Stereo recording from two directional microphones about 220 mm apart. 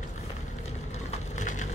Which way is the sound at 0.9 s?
30° left (ahead or behind).